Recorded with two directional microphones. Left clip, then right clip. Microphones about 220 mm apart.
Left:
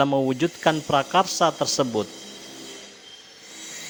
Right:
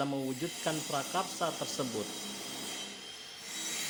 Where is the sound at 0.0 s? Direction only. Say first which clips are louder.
Left 14 dB; 45° left (ahead or behind).